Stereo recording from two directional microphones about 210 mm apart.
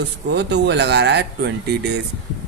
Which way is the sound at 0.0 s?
55° right (ahead or behind).